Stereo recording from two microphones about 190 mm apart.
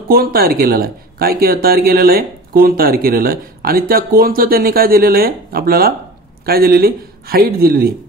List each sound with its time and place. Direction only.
0.1 s speech: 50° right (ahead or behind)